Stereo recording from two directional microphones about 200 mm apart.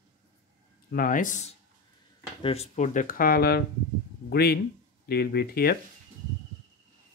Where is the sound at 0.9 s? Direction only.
40° left (ahead or behind).